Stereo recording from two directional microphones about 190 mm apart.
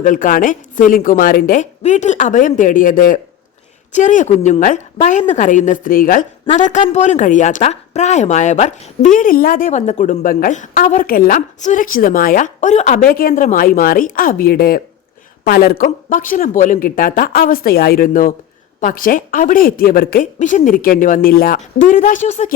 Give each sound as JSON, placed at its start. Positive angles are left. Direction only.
{"t": 0.0, "sound": "a woman's voice", "side_deg": 45}
{"t": 6.4, "sound": "a woman's voice", "side_deg": 35}